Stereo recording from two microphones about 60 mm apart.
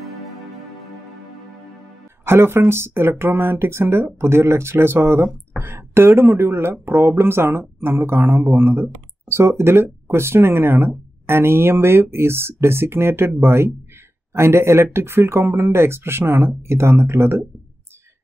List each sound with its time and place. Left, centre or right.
2.2 s speech: right
14.3 s speech: right